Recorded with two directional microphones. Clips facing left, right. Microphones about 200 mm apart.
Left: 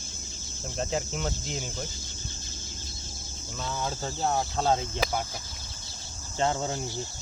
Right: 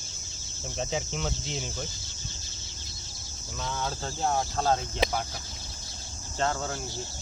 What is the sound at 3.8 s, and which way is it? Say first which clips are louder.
Speech: left 1 dB; 5° left (ahead or behind).